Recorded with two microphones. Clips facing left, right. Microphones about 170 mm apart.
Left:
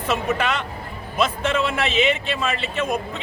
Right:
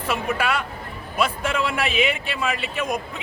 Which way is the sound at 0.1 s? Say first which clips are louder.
Left 1 dB; 10° right (ahead or behind).